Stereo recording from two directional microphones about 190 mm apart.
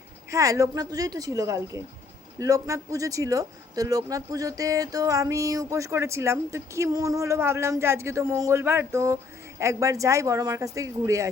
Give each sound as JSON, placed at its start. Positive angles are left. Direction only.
{"t": 0.3, "sound": "speech", "side_deg": -15}